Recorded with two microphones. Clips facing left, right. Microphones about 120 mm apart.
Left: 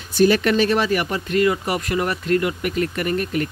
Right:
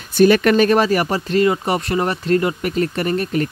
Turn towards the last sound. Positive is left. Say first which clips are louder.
# right 3 dB
turn(degrees=-35)  # may be behind; listen again after turning